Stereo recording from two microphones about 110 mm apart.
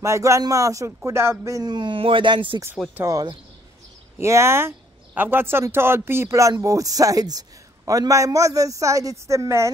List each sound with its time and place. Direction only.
0.0 s speech: 25° right (ahead or behind)
1.6 s speech: 40° right (ahead or behind)
3.1 s a man's voice: 35° right (ahead or behind)